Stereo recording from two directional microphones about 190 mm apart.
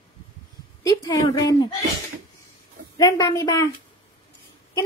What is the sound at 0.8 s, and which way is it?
Speech, 20° left (ahead or behind).